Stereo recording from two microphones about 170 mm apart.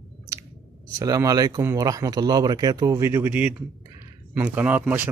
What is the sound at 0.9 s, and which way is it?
Speech, 20° right (ahead or behind).